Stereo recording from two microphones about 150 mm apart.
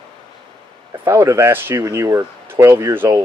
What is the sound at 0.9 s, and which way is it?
Speech, 20° right (ahead or behind).